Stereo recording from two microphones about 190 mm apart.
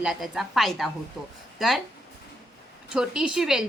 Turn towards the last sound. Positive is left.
turn(degrees=-5)  # may be behind; listen again after turning